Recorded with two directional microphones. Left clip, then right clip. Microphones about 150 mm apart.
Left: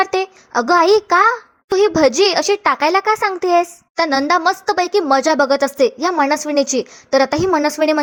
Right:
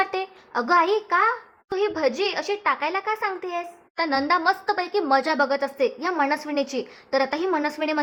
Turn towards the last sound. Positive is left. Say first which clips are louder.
# left 9 dB
turn(degrees=40)  # may be behind; listen again after turning